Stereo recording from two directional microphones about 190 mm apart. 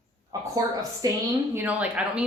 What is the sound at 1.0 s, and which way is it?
Speech, 20° right (ahead or behind).